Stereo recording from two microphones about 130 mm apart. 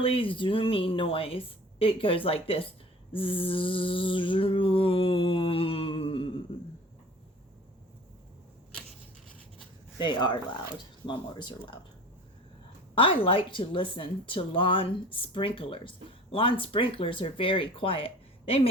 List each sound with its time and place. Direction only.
0.0 s a woman's voice: 45° left (ahead or behind)
10.0 s speech: 35° left (ahead or behind)
12.9 s a woman's voice: 40° left (ahead or behind)